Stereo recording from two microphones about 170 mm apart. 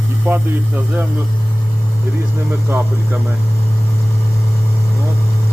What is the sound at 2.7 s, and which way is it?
Speech, 10° right (ahead or behind).